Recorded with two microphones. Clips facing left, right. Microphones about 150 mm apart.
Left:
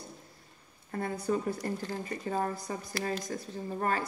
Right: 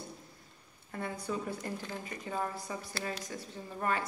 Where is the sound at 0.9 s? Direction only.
45° left (ahead or behind).